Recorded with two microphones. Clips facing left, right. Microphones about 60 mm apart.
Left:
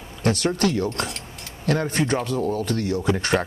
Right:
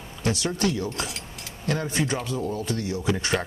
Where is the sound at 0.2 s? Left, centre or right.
Left.